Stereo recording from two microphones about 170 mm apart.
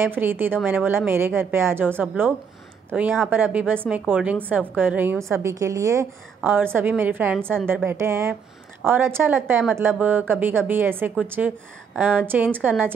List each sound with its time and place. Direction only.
0.0 s a woman's voice: 10° right (ahead or behind)